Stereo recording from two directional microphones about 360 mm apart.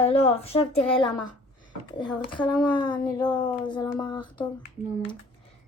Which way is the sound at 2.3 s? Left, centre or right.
Centre.